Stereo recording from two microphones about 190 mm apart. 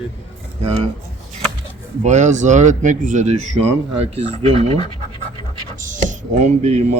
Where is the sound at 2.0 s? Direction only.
40° right (ahead or behind).